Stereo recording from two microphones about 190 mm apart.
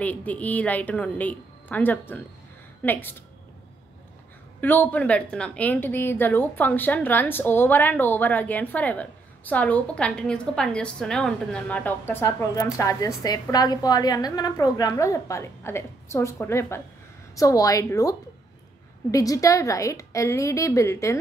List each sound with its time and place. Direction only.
0.0 s a woman's voice: 10° left (ahead or behind)
4.6 s a woman's voice: 10° left (ahead or behind)